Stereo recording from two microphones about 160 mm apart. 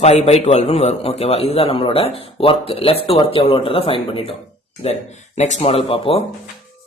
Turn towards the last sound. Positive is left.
turn(degrees=35)  # may be behind; listen again after turning